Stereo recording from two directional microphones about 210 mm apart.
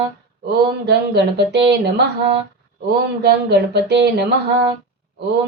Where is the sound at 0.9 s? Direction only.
50° right (ahead or behind).